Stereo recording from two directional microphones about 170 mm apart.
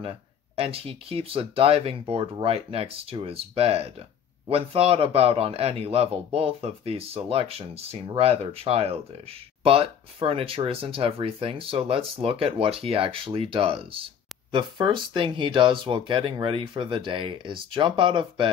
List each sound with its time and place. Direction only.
0.6 s speech: 35° right (ahead or behind)